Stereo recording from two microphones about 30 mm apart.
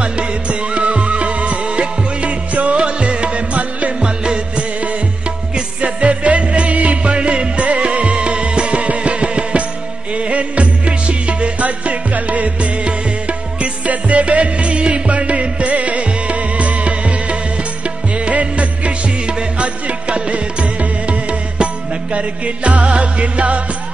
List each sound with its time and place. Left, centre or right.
0.0 s music: right
2.5 s music: right
2.8 s music: right
4.0 s music: right
5.5 s music: right
11.6 s music: right
12.8 s music: right
13.8 s music: right